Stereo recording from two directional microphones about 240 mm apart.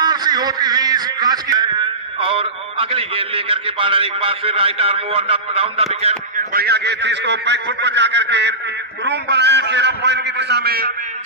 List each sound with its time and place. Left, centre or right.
0.0 s a sound: centre
2.1 s a man's voice: right
6.0 s speech: right